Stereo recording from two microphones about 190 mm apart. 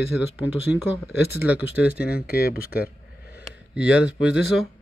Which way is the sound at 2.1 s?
55° left (ahead or behind).